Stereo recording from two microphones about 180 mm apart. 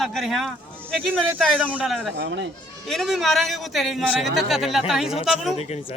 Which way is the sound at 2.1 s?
75° right (ahead or behind).